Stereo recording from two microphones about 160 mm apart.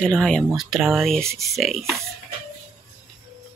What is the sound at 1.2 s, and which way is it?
Speech, 20° right (ahead or behind).